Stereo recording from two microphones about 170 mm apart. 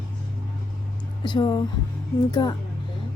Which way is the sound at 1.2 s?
25° left (ahead or behind).